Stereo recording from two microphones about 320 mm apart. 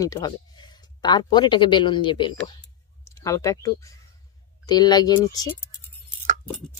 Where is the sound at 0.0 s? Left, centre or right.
Centre.